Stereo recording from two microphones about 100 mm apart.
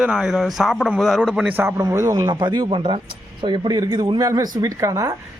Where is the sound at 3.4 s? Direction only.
50° right (ahead or behind); by 5.1 s 35° right (ahead or behind).